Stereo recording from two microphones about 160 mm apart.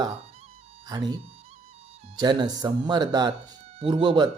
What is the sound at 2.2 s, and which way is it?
Speech, 25° right (ahead or behind).